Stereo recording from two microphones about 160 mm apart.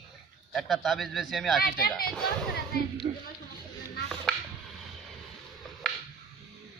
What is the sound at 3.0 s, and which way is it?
Speech, 35° right (ahead or behind).